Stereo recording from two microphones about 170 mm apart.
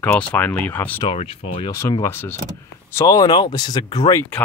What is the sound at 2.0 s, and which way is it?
Speech, 15° left (ahead or behind).